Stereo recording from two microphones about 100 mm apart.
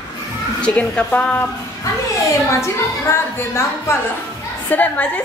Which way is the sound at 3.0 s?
25° left (ahead or behind).